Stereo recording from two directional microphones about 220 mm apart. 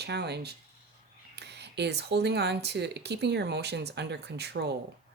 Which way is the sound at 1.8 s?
50° right (ahead or behind).